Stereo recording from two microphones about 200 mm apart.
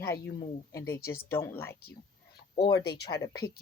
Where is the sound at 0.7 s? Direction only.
15° left (ahead or behind).